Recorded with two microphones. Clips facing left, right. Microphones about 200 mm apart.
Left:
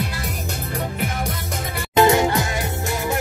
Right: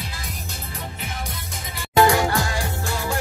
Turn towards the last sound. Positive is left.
turn(degrees=20)  # may be behind; listen again after turning